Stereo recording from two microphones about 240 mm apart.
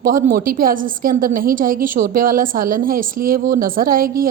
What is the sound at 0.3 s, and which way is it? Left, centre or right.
A woman's voice, right.